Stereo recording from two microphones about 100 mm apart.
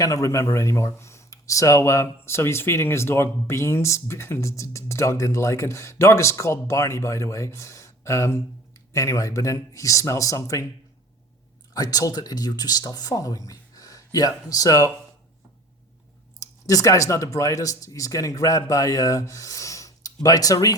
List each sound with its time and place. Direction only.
0.0 s speech: 35° left (ahead or behind)
11.7 s speech: 40° left (ahead or behind)
16.4 s speech: 35° left (ahead or behind)